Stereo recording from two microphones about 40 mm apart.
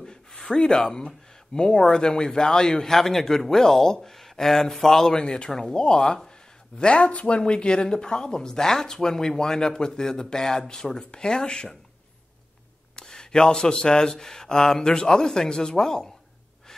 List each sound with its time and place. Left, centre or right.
0.0 s speech: centre
12.9 s speech: centre